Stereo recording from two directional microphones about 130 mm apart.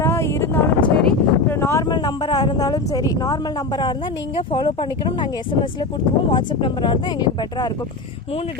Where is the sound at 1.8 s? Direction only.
35° left (ahead or behind).